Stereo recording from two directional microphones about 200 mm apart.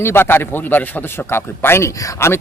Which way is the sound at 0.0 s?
10° left (ahead or behind).